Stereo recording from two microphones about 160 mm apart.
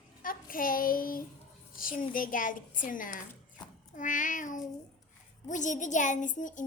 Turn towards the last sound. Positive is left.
turn(degrees=55)  # may be behind; listen again after turning